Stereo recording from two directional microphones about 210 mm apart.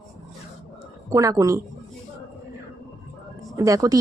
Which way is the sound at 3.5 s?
15° right (ahead or behind).